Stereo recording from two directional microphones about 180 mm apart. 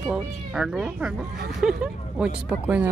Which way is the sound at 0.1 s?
5° right (ahead or behind).